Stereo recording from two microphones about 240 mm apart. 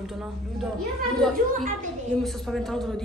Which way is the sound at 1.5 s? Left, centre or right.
Right.